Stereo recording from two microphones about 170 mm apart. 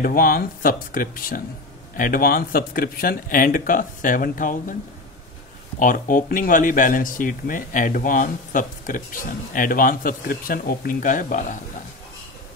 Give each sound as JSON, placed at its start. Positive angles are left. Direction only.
{"t": 0.0, "sound": "speech", "side_deg": 60}
{"t": 5.8, "sound": "speech", "side_deg": 50}